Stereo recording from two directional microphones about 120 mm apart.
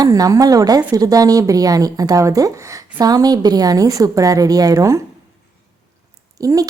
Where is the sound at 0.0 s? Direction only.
30° right (ahead or behind).